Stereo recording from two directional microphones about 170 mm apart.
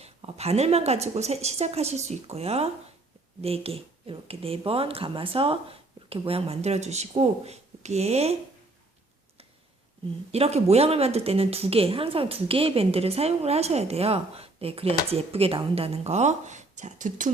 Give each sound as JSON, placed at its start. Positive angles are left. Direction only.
{"t": 0.0, "sound": "a woman's voice", "side_deg": -40}
{"t": 10.3, "sound": "a woman's voice", "side_deg": -35}